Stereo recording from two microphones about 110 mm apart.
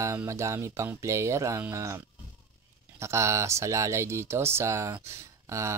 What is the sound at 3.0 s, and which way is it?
Speech, 25° right (ahead or behind).